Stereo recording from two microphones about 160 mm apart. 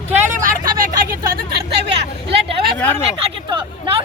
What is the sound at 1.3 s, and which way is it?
Hubbub, 80° right.